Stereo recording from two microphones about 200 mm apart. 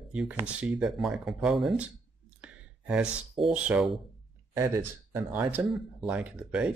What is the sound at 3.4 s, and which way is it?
Speech, 5° right (ahead or behind).